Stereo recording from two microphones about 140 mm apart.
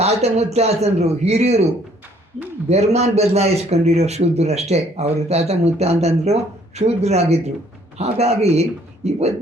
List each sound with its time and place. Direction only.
0.0 s a man's voice: 50° right (ahead or behind)
2.6 s a man's voice: 50° right (ahead or behind)